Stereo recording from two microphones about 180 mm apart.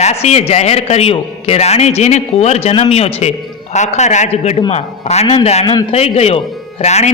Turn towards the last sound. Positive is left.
turn(degrees=40)  # may be behind; listen again after turning